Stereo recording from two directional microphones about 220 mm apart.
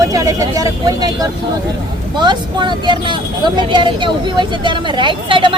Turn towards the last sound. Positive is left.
turn(degrees=-20)  # may be behind; listen again after turning